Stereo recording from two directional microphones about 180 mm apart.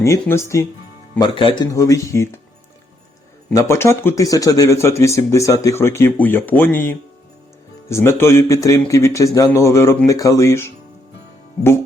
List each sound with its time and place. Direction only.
0.0 s speech: 15° left (ahead or behind)
1.2 s speech: 25° left (ahead or behind)
3.5 s speech: 15° left (ahead or behind)